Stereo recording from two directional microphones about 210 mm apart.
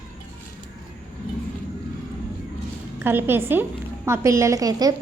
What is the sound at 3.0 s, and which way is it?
A woman's voice, 10° right (ahead or behind).